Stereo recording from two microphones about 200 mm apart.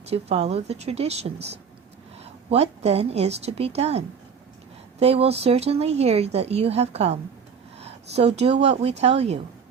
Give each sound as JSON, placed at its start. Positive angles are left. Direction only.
{"t": 0.0, "sound": "speech", "side_deg": -30}